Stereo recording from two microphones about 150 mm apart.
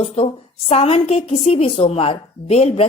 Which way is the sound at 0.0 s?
45° left (ahead or behind).